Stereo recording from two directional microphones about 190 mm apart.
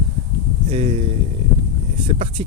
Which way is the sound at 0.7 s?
35° right (ahead or behind).